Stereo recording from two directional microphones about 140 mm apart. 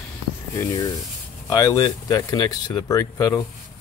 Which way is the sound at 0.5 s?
25° left (ahead or behind).